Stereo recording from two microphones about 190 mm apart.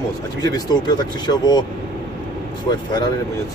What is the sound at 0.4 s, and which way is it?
Speech, 20° left (ahead or behind).